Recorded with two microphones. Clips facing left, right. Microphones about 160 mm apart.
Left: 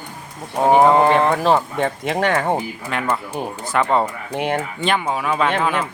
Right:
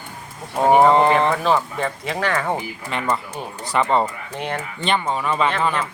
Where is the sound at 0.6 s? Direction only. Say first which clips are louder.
Left 1 dB; centre (ahead or behind).